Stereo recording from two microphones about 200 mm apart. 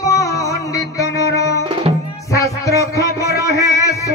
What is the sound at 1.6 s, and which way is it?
Music, 25° right (ahead or behind).